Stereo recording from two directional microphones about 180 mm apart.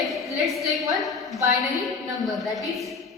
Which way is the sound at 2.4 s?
Centre (ahead or behind).